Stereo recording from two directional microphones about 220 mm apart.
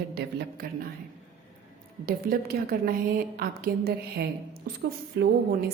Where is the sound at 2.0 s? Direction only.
40° right (ahead or behind).